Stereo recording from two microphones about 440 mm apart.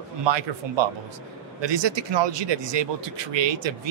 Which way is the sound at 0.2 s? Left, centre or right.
Right.